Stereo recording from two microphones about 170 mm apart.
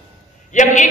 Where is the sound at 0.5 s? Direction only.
45° left (ahead or behind).